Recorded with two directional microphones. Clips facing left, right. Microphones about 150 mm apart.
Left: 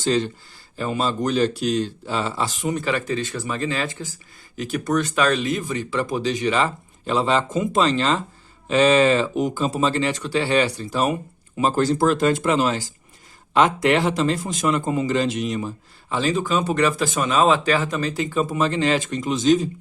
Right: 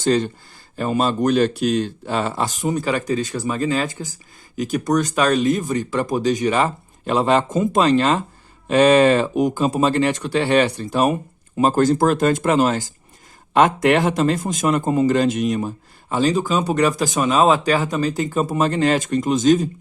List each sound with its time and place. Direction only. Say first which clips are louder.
0.0 s a man's voice: right 3 dB; 50° right (ahead or behind)